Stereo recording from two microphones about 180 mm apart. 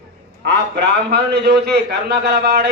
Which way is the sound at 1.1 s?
60° right (ahead or behind).